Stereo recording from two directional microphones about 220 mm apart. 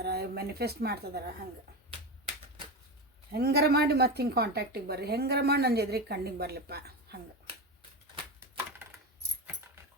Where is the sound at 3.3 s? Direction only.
45° right (ahead or behind).